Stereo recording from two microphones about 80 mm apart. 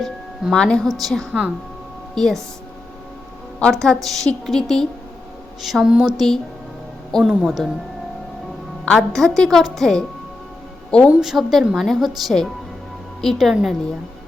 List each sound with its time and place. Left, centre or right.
0.5 s a woman's voice: centre
1.3 s speech: centre
2.1 s speech: centre
3.6 s speech: centre
5.6 s speech: centre
8.8 s a woman's voice: centre
11.2 s speech: centre